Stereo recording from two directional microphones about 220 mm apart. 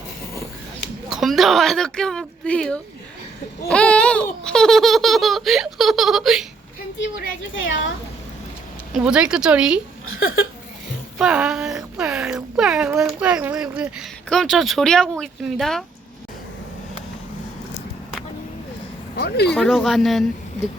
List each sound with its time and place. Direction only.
1.1 s speech: centre (ahead or behind)
7.0 s a woman's voice: 60° left (ahead or behind)
8.9 s speech: 5° right (ahead or behind)
10.1 s a sound: 65° left (ahead or behind)
11.2 s speech: 5° right (ahead or behind)
19.1 s speech: 45° left (ahead or behind)
19.5 s speech: centre (ahead or behind)